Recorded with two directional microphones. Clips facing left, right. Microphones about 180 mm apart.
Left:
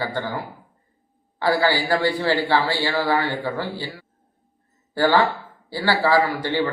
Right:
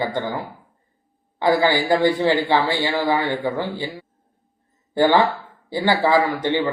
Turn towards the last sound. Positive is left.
turn(degrees=-20)  # may be behind; listen again after turning